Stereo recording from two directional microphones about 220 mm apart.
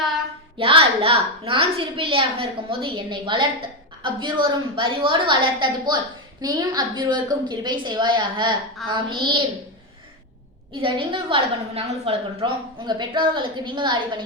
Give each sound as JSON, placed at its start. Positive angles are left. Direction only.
{"t": 0.6, "sound": "a woman's voice", "side_deg": -25}
{"t": 10.8, "sound": "a woman's voice", "side_deg": -25}